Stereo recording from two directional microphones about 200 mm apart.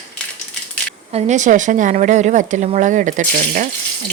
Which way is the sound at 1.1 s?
35° right (ahead or behind).